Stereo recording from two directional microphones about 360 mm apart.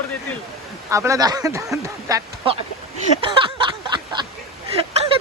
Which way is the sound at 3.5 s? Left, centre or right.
Centre.